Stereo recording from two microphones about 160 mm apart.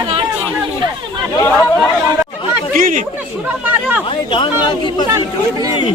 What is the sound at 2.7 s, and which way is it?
Speech, 55° right (ahead or behind).